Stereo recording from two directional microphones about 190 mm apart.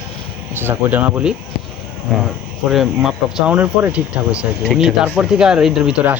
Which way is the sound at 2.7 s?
Centre (ahead or behind).